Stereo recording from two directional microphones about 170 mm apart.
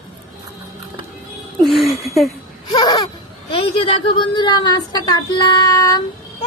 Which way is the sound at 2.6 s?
25° left (ahead or behind).